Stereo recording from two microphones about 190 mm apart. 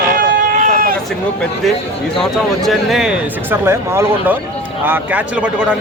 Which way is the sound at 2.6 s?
Centre (ahead or behind).